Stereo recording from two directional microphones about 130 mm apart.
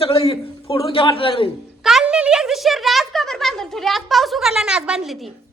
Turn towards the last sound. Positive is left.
turn(degrees=0)  # may be behind; listen again after turning